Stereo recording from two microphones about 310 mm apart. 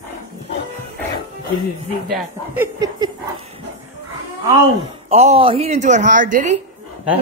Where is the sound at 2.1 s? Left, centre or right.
Centre.